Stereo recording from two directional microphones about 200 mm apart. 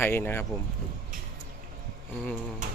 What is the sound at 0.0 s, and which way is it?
Speech, 10° left (ahead or behind).